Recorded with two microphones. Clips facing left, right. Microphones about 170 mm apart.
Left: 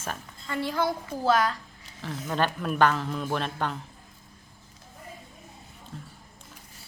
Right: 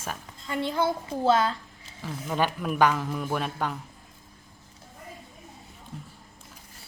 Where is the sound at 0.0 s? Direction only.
10° right (ahead or behind).